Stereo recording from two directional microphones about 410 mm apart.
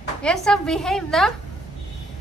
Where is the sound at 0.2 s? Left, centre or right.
Centre.